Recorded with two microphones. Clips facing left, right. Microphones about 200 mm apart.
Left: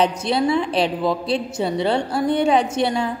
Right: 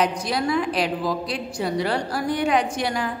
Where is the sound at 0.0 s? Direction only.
25° left (ahead or behind).